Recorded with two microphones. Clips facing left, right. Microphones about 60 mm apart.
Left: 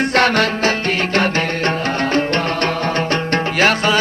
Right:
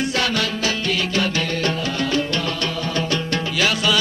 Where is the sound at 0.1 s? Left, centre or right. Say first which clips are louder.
Left 7 dB; left.